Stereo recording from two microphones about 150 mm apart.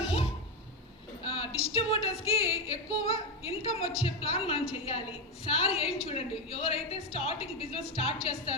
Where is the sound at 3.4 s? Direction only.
40° left (ahead or behind).